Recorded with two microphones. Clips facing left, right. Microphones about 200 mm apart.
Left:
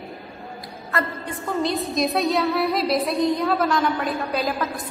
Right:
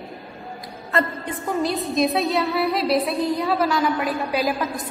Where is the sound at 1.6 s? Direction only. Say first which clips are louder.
Right 3 dB; centre (ahead or behind).